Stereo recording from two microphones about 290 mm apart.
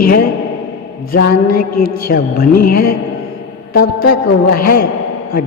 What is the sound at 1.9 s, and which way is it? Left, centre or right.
Speech, left.